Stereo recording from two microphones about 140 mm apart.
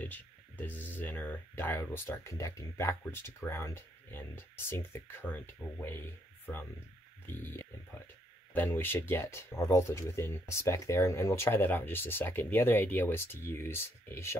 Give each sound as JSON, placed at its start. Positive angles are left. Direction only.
{"t": 0.0, "sound": "speech", "side_deg": 10}